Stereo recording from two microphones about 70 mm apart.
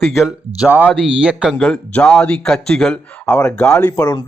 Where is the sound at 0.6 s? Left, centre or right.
Right.